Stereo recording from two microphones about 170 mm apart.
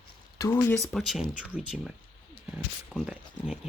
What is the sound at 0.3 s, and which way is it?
Speech, 15° left (ahead or behind).